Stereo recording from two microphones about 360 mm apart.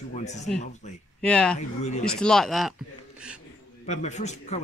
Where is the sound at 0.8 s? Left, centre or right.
Centre.